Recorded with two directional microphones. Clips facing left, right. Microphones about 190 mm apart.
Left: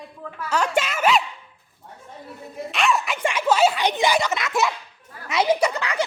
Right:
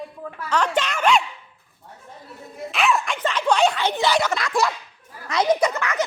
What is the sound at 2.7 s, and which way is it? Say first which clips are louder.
Speech: right 1 dB; centre (ahead or behind).